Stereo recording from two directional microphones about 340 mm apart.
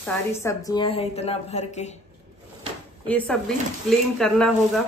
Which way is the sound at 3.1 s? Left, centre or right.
Centre.